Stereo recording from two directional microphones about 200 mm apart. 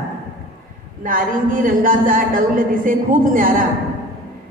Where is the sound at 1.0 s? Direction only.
45° right (ahead or behind).